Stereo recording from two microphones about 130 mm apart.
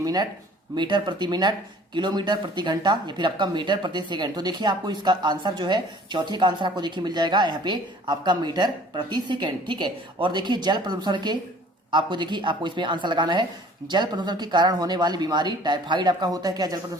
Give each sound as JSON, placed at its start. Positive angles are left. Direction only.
{"t": 0.0, "sound": "speech", "side_deg": -30}